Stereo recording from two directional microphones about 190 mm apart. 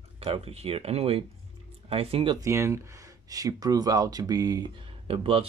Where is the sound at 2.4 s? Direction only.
15° right (ahead or behind).